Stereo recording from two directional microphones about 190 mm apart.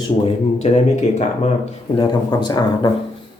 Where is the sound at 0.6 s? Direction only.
35° left (ahead or behind).